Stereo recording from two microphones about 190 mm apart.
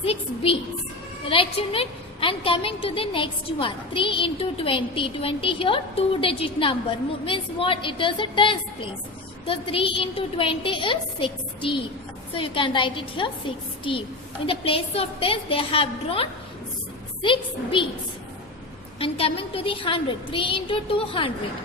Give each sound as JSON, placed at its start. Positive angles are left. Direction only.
{"t": 0.0, "sound": "a sound", "side_deg": 30}
{"t": 1.3, "sound": "a woman's voice", "side_deg": 30}
{"t": 18.9, "sound": "a woman's voice", "side_deg": 30}